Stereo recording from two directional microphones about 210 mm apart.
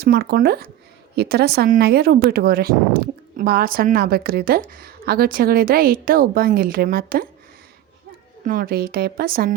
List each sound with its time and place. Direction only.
0.0 s speech: 45° right (ahead or behind)
8.4 s speech: 40° right (ahead or behind)